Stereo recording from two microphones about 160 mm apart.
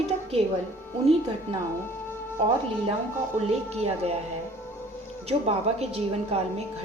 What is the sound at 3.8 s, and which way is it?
Speech, 40° right (ahead or behind).